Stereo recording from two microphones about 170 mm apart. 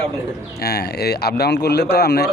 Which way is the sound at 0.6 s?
70° left (ahead or behind).